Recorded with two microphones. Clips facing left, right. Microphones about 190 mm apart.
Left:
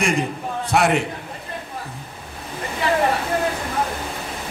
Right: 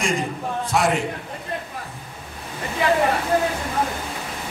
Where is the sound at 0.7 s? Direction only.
65° left (ahead or behind).